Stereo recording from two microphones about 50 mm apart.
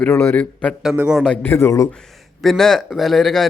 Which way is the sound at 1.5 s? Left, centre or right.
Left.